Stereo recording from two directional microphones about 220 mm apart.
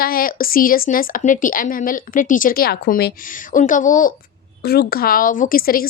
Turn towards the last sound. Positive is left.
turn(degrees=40)  # may be behind; listen again after turning